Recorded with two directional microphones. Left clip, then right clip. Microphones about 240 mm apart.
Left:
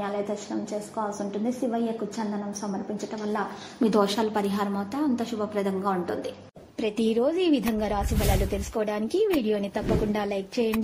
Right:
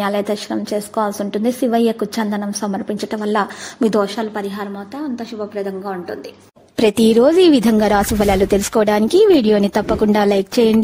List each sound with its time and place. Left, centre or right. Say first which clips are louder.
0.0 s a woman's voice: right 10 dB; right
3.8 s a woman's voice: right 6 dB; centre
6.8 s a woman's voice: right 13 dB; right